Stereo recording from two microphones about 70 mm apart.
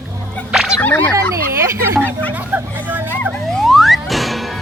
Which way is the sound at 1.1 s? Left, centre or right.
Right.